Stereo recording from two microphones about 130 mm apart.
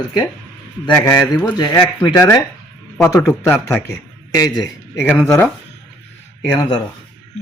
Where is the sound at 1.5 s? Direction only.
30° left (ahead or behind).